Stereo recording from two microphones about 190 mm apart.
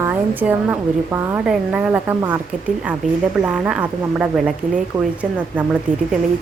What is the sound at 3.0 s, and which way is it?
Speech, 40° right (ahead or behind).